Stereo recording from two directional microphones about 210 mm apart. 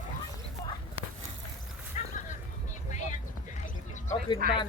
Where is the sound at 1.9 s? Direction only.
35° left (ahead or behind).